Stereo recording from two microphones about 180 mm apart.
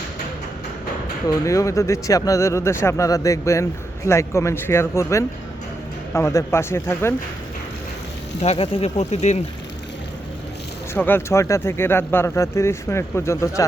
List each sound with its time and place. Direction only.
1.5 s speech: 15° left (ahead or behind)
8.4 s speech: 35° left (ahead or behind)
10.9 s speech: 10° left (ahead or behind)